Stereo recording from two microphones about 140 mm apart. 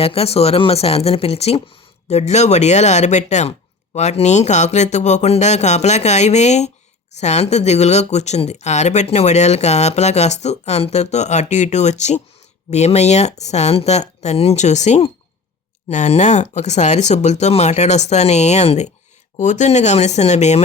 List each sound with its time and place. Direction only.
0.0 s speech: 45° left (ahead or behind)